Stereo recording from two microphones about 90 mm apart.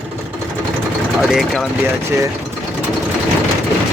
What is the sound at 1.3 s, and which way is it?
Speech, centre (ahead or behind).